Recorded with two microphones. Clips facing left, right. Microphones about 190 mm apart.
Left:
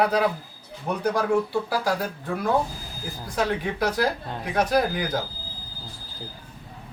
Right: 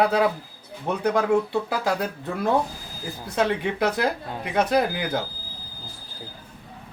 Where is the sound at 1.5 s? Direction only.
20° right (ahead or behind).